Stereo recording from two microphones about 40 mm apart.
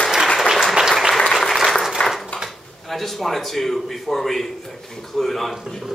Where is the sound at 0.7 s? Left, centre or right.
Centre.